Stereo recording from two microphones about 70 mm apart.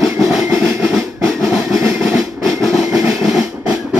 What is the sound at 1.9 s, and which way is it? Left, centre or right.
Train, centre.